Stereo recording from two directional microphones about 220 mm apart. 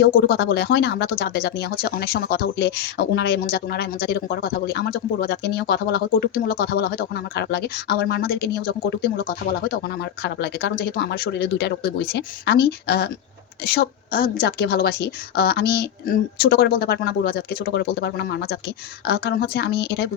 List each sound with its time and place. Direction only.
0.0 s speech: 40° left (ahead or behind)